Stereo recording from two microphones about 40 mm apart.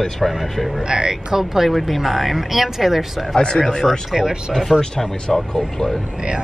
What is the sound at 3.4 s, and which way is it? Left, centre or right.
Speech, centre.